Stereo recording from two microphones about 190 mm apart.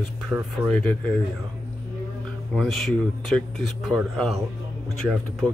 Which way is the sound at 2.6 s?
Centre (ahead or behind).